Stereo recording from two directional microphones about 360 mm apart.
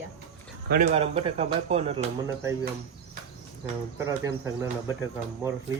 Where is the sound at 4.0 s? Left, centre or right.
Centre.